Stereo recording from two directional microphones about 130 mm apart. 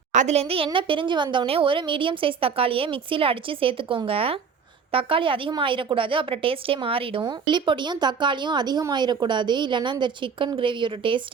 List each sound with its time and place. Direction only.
0.1 s a woman's voice: 65° right (ahead or behind); by 11.2 s 40° right (ahead or behind)